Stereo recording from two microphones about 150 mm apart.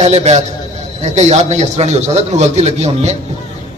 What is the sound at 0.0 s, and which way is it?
A man's voice, 45° right (ahead or behind).